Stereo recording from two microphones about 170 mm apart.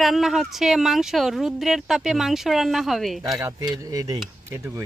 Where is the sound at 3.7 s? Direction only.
20° right (ahead or behind).